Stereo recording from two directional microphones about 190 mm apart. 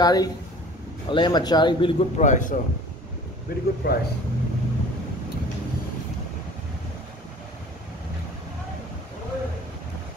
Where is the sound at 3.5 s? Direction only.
55° left (ahead or behind).